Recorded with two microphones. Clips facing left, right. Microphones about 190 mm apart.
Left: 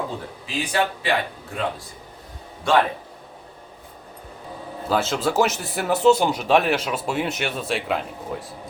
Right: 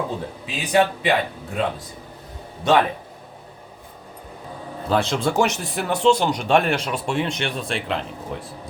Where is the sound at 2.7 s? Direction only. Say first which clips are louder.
Right 1 dB; 20° right (ahead or behind).